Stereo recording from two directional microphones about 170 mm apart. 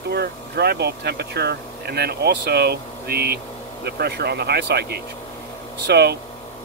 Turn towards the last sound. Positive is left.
turn(degrees=-70)  # may be behind; listen again after turning